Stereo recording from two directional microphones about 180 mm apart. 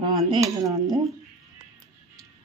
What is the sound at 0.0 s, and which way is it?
Speech, 25° right (ahead or behind).